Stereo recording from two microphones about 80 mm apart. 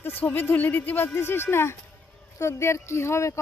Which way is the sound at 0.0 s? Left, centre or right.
Left.